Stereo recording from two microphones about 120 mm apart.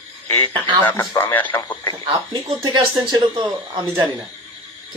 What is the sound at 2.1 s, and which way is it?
Speech, 35° right (ahead or behind).